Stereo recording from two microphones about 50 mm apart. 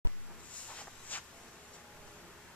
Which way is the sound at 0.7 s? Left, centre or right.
Left.